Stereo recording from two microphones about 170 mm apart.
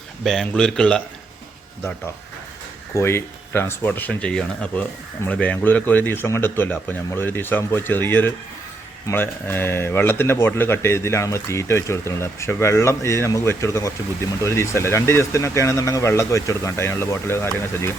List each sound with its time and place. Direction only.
0.3 s speech: 5° left (ahead or behind)
2.9 s speech: 15° left (ahead or behind)